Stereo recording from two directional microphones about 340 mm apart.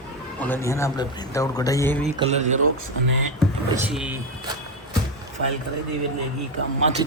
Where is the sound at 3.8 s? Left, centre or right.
Centre.